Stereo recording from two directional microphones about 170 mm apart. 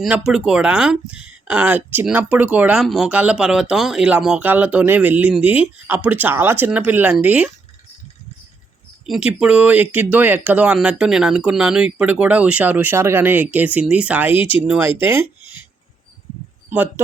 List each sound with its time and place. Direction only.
0.0 s speech: 5° right (ahead or behind)
9.0 s speech: 5° right (ahead or behind)
16.6 s speech: 10° right (ahead or behind)